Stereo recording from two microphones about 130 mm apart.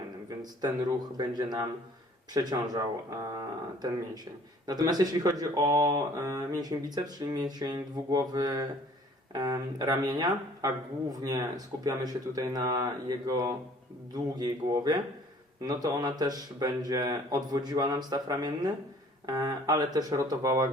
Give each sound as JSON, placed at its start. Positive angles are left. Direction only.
{"t": 0.6, "sound": "speech", "side_deg": -30}
{"t": 4.6, "sound": "speech", "side_deg": -30}